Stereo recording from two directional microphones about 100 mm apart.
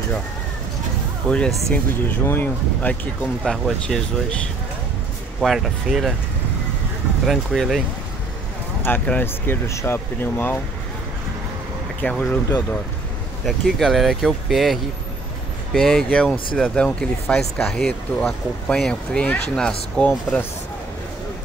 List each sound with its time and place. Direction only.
1.2 s speech: 10° left (ahead or behind)
1.7 s speech: 20° left (ahead or behind)
3.4 s speech: 5° left (ahead or behind)
5.4 s speech: centre (ahead or behind)
7.2 s speech: centre (ahead or behind)
8.8 s speech: 15° left (ahead or behind)
12.0 s speech: 15° left (ahead or behind)
13.5 s speech: centre (ahead or behind); by 20.4 s 15° left (ahead or behind)